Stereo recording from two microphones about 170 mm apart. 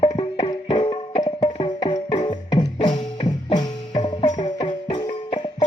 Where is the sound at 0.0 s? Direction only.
35° left (ahead or behind).